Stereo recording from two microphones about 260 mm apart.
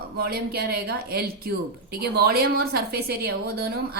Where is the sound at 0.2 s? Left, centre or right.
Right.